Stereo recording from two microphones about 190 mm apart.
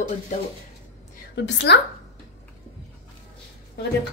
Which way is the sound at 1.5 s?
70° left (ahead or behind).